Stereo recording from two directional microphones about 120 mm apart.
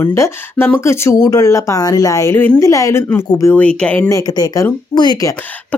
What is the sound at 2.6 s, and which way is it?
Speech, 25° left (ahead or behind).